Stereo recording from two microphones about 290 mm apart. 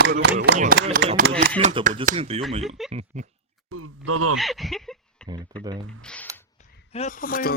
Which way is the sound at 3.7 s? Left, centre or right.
Right.